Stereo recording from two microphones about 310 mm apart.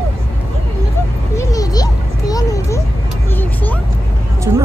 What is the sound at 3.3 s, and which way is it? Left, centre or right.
Vehicle, centre.